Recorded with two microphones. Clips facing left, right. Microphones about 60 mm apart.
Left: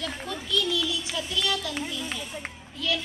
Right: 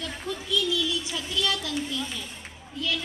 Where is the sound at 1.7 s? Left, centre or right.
Left.